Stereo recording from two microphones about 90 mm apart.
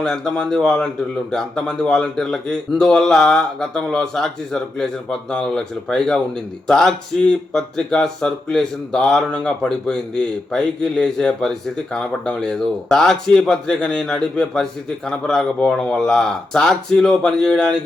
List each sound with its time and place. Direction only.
0.0 s a man's voice: 5° left (ahead or behind)